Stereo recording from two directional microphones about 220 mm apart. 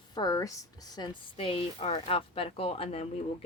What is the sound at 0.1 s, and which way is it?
Speech, 15° left (ahead or behind).